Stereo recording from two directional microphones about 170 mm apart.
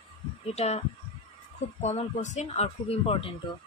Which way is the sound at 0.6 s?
40° left (ahead or behind).